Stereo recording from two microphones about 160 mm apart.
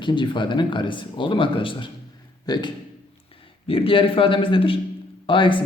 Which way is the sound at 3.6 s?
35° left (ahead or behind).